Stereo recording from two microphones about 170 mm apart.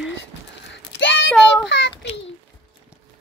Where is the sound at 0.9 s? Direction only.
90° left.